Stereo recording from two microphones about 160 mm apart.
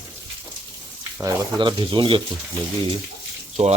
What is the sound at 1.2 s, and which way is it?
Speech, 30° right (ahead or behind).